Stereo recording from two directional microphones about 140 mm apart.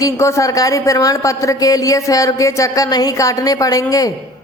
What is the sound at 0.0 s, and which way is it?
Speech, 20° left (ahead or behind).